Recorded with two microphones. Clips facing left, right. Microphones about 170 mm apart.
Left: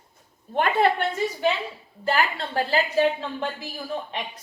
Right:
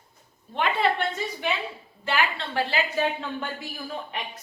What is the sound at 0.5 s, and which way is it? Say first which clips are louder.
Speech: left 4 dB; 50° left (ahead or behind).